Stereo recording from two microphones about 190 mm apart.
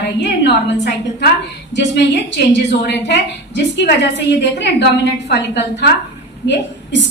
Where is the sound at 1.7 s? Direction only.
70° left (ahead or behind).